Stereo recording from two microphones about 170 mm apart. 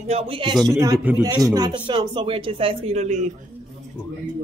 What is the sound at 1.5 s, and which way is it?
Speech, 25° right (ahead or behind).